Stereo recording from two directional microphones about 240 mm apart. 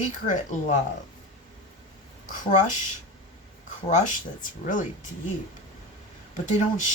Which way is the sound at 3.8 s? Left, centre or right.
Left.